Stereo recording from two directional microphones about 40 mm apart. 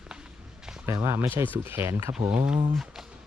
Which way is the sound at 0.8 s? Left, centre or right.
Right.